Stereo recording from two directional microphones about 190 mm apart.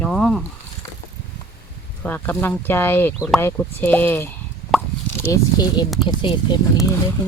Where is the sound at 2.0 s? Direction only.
10° left (ahead or behind).